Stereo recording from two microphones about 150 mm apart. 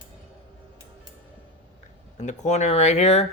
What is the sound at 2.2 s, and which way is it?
Speech, 50° left (ahead or behind).